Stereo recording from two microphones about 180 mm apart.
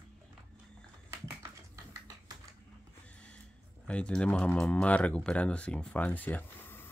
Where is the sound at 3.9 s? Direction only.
5° left (ahead or behind).